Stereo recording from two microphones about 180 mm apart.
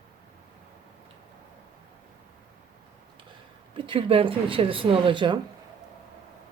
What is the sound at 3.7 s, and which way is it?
Speech, 30° right (ahead or behind).